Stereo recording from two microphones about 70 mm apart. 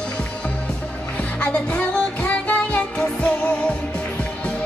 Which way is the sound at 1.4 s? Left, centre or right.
Centre.